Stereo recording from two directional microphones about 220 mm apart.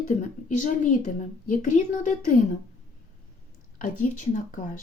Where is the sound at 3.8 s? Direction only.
35° left (ahead or behind).